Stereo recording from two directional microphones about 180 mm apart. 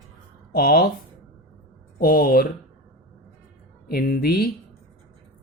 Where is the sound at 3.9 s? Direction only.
55° left (ahead or behind).